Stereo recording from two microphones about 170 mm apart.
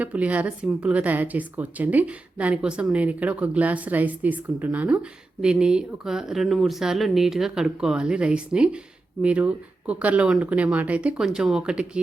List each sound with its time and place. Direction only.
0.0 s a woman's voice: 10° right (ahead or behind)